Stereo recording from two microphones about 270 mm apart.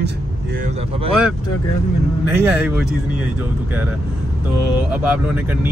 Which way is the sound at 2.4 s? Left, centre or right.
Centre.